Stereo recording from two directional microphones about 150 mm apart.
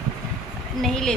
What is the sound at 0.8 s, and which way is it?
Speech, 5° left (ahead or behind).